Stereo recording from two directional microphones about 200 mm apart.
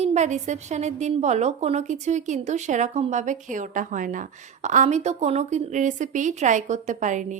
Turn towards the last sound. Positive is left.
turn(degrees=-40)  # may be behind; listen again after turning